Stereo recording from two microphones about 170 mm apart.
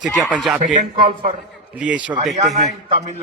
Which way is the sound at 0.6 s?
45° right (ahead or behind).